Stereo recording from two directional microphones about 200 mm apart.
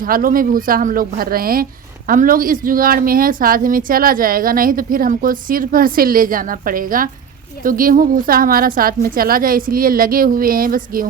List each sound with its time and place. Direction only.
0.0 s a woman's voice: 45° right (ahead or behind)